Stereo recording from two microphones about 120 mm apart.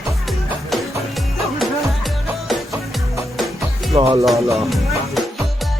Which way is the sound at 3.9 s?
50° right (ahead or behind).